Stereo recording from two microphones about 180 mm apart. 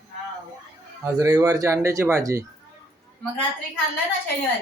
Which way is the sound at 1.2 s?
15° right (ahead or behind).